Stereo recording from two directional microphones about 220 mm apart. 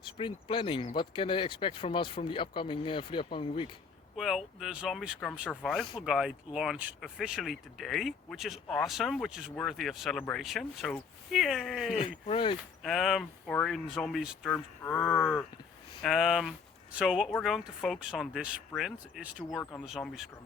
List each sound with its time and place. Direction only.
0.2 s speech: 25° left (ahead or behind)
4.2 s speech: centre (ahead or behind)
11.9 s speech: 25° left (ahead or behind)
12.8 s speech: centre (ahead or behind)